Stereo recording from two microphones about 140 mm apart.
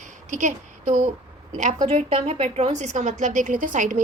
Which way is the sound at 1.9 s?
45° right (ahead or behind).